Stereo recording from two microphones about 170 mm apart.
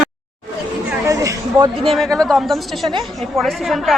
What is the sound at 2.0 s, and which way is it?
Speech, centre (ahead or behind).